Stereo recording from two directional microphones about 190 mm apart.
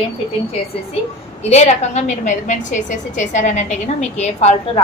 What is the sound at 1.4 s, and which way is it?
A woman's voice, 35° left (ahead or behind).